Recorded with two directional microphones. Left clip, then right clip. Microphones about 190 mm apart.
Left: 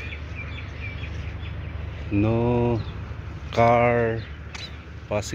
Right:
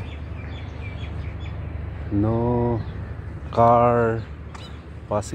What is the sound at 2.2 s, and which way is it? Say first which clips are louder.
Speech: even; 15° left (ahead or behind).